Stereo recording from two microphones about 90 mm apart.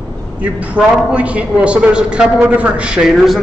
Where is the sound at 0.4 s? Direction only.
15° right (ahead or behind).